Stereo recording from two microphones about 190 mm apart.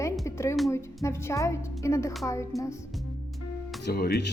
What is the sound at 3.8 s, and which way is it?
Speech, 60° left (ahead or behind).